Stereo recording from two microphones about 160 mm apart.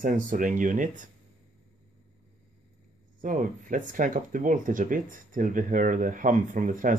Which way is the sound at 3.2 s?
55° right (ahead or behind).